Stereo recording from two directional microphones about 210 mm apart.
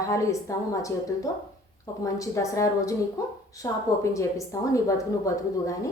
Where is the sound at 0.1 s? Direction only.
15° left (ahead or behind).